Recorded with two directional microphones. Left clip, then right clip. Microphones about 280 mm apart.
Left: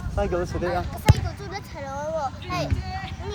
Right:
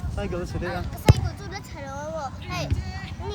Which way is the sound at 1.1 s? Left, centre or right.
Right.